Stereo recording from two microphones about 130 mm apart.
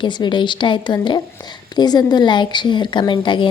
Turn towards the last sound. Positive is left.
turn(degrees=40)  # may be behind; listen again after turning